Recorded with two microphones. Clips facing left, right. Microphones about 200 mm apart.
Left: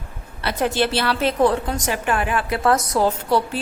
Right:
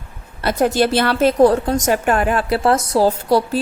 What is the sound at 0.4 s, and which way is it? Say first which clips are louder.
A woman's voice: right 5 dB; 40° right (ahead or behind).